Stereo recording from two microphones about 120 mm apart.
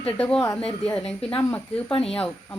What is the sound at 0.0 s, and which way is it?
A woman's voice, 10° left (ahead or behind).